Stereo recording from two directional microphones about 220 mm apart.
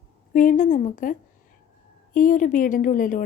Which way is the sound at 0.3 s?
35° left (ahead or behind).